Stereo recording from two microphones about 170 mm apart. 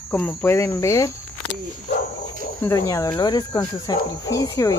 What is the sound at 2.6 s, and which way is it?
Speech, 20° left (ahead or behind).